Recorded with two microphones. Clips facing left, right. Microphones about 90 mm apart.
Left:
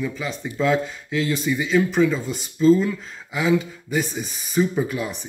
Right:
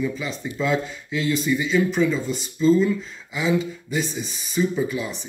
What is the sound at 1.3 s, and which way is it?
Speech, 40° left (ahead or behind).